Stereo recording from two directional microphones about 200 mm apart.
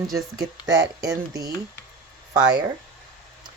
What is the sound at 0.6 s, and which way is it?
Speech, 65° right (ahead or behind).